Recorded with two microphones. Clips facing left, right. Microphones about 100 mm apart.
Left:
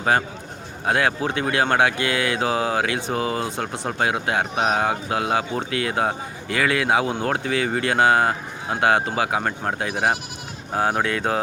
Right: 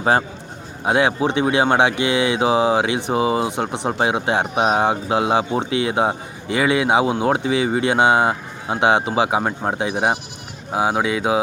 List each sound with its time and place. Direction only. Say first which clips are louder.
0.0 s a man's voice: right 3 dB; 25° right (ahead or behind); by 11.3 s 10° right (ahead or behind)